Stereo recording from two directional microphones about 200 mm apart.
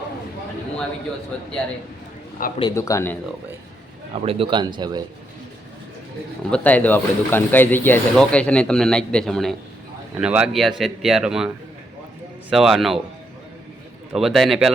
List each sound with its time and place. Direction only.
2.6 s a man's voice: 20° left (ahead or behind)
4.1 s a man's voice: 30° right (ahead or behind)
6.5 s speech: 5° left (ahead or behind)
14.1 s speech: centre (ahead or behind)